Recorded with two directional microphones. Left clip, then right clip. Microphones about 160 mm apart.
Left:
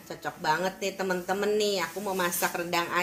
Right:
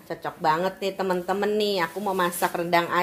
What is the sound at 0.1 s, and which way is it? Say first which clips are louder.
Speech: right 4 dB; 60° right (ahead or behind).